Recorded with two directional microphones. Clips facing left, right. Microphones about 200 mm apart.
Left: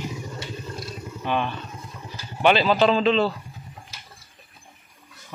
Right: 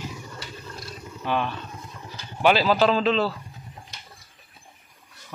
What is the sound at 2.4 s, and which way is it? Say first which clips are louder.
Speech: left 1 dB; 5° right (ahead or behind).